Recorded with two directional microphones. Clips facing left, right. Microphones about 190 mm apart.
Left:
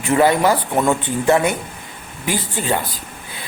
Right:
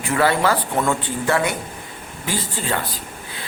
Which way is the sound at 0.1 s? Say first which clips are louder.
Left 4 dB; 15° left (ahead or behind).